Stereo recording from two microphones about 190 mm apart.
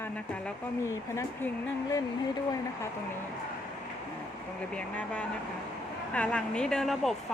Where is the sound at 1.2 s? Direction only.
15° left (ahead or behind).